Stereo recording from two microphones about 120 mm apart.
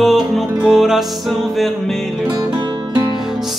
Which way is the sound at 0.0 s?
5° right (ahead or behind).